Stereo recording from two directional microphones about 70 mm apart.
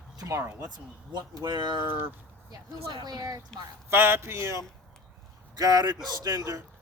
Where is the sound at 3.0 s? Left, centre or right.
Right.